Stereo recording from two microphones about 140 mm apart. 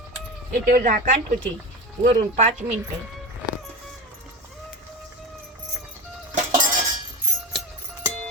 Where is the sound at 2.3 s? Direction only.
55° right (ahead or behind).